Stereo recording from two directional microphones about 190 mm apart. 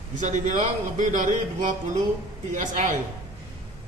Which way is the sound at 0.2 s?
40° right (ahead or behind).